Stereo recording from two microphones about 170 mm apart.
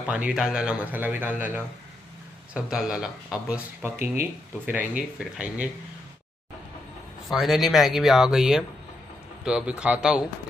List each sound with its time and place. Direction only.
0.0 s speech: 5° right (ahead or behind)
7.2 s speech: centre (ahead or behind)